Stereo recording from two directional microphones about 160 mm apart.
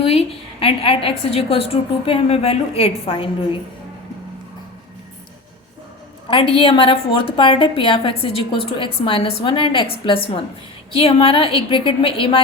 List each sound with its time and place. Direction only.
0.0 s a woman's voice: 35° left (ahead or behind)
6.2 s a woman's voice: 35° left (ahead or behind)